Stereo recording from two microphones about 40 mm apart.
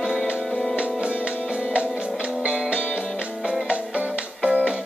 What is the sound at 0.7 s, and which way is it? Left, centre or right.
Music, right.